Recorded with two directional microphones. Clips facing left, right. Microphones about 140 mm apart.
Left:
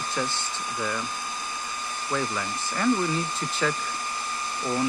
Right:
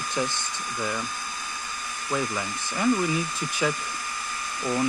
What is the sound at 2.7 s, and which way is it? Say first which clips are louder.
Hair dryer: right 1 dB; 10° right (ahead or behind).